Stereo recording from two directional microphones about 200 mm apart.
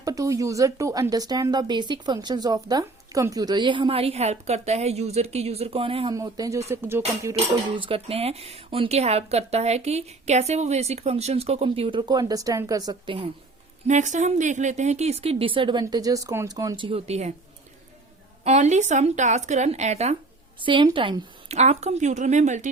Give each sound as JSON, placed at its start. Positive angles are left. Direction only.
{"t": 0.0, "sound": "speech", "side_deg": -15}
{"t": 7.3, "sound": "speech", "side_deg": -25}
{"t": 13.8, "sound": "speech", "side_deg": -35}
{"t": 18.4, "sound": "speech", "side_deg": -35}